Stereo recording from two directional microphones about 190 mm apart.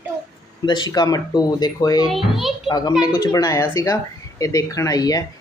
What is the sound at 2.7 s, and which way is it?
Speech, 20° left (ahead or behind).